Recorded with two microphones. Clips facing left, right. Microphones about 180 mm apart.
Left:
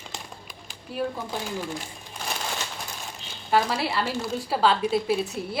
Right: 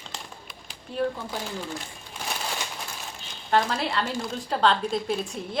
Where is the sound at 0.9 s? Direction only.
5° left (ahead or behind).